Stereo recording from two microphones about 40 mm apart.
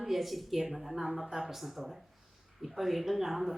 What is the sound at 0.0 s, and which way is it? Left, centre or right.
A woman's voice, centre.